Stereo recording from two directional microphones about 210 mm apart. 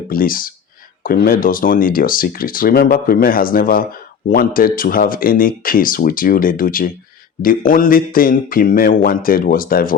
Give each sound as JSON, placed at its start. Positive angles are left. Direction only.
{"t": 0.1, "sound": "speech", "side_deg": 40}